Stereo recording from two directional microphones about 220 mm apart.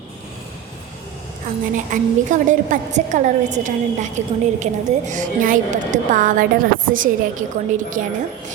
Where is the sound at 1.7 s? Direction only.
35° right (ahead or behind).